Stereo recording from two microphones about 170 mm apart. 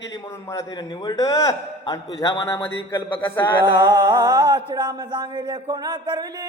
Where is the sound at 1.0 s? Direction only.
20° left (ahead or behind).